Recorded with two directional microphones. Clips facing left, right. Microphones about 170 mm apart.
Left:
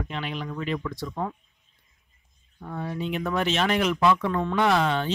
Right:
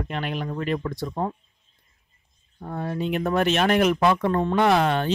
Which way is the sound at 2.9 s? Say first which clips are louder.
Right 4 dB; 50° right (ahead or behind).